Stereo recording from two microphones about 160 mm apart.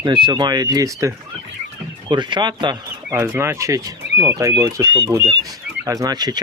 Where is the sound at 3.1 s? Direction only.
15° right (ahead or behind).